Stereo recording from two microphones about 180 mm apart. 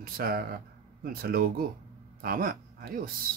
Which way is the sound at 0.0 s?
55° right (ahead or behind).